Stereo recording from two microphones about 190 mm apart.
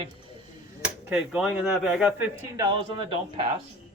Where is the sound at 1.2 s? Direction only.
5° right (ahead or behind).